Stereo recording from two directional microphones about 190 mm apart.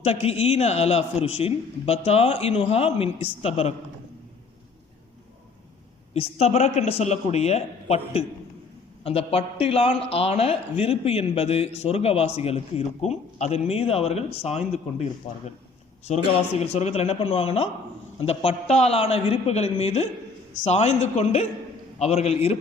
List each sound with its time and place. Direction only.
0.0 s a man's voice: 35° left (ahead or behind)
6.1 s a man's voice: 35° left (ahead or behind)
16.0 s a man's voice: 35° left (ahead or behind)